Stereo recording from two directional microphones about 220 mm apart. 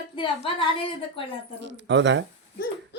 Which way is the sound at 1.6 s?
55° right (ahead or behind).